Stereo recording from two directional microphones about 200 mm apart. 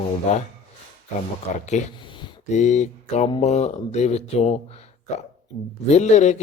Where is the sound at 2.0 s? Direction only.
25° left (ahead or behind).